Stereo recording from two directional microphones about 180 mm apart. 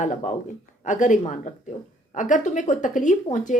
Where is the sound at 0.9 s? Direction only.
45° left (ahead or behind).